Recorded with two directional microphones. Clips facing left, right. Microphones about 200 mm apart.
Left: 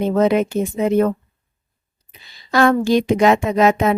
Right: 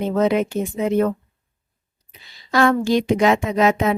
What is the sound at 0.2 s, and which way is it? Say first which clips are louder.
Speech: left 2 dB; 45° left (ahead or behind).